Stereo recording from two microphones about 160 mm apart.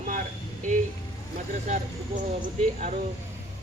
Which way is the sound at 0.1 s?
55° right (ahead or behind).